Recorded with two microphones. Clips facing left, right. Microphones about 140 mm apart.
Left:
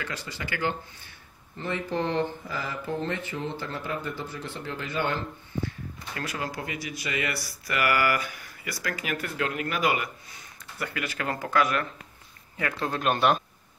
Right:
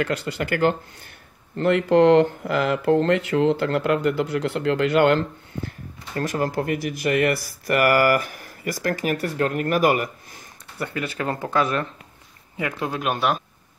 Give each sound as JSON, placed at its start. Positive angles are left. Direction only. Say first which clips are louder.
{"t": 0.0, "sound": "speech", "louder": "right 11 dB", "side_deg": -60}
{"t": 1.6, "sound": "speech", "louder": "right 13 dB", "side_deg": -85}
{"t": 6.1, "sound": "speech", "louder": "right 10 dB", "side_deg": -45}
{"t": 10.8, "sound": "speech", "louder": "right 5 dB", "side_deg": -30}
{"t": 12.5, "sound": "speech", "louder": "right 3 dB", "side_deg": -15}